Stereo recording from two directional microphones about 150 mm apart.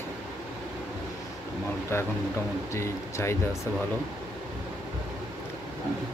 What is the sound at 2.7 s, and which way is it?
Speech, 20° left (ahead or behind).